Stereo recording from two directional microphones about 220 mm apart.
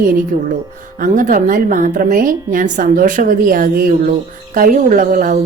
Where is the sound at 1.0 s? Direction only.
35° right (ahead or behind).